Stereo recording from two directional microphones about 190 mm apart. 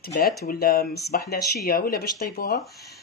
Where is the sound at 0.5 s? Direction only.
50° left (ahead or behind).